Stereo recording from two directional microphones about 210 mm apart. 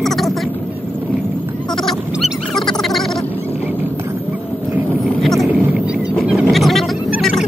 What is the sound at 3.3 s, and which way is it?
Wild animals, 10° right (ahead or behind).